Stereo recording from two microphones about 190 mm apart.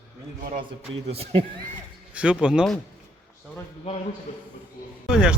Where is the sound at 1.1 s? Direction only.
30° right (ahead or behind).